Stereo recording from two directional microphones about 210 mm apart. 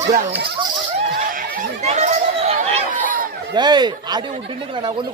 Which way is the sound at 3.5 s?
20° right (ahead or behind).